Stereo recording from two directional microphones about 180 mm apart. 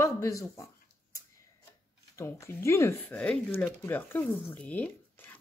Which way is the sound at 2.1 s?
15° left (ahead or behind).